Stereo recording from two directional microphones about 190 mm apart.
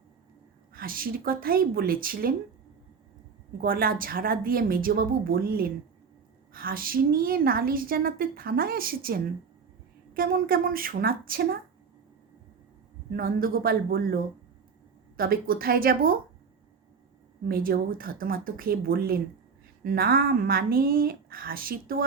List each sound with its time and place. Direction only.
0.7 s a woman's voice: 50° right (ahead or behind)
3.6 s a woman's voice: 50° right (ahead or behind)
13.1 s a woman's voice: 50° right (ahead or behind)
17.5 s a woman's voice: 50° right (ahead or behind)